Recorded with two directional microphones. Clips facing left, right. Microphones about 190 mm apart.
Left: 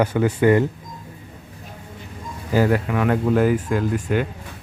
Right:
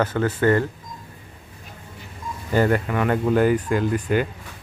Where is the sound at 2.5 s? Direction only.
5° left (ahead or behind).